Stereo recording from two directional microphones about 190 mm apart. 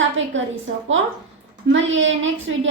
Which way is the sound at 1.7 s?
80° right.